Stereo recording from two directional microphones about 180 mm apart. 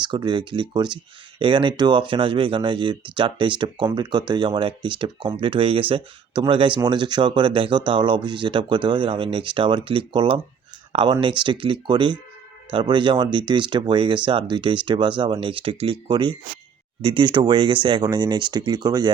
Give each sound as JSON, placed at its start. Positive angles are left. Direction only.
{"t": 0.0, "sound": "speech", "side_deg": -25}